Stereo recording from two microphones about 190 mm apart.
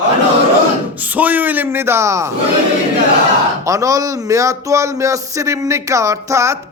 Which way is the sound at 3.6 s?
15° right (ahead or behind).